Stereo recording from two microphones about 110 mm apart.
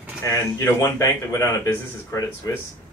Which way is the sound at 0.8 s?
25° left (ahead or behind).